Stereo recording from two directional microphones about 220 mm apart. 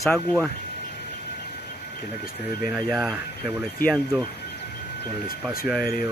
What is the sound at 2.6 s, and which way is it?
Speech, 5° right (ahead or behind).